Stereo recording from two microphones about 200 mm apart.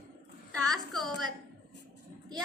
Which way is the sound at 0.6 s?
Centre (ahead or behind).